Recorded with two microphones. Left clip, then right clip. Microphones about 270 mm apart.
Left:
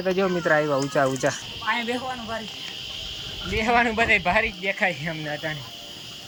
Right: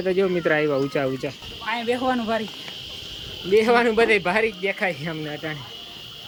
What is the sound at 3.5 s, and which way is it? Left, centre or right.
Speech, centre.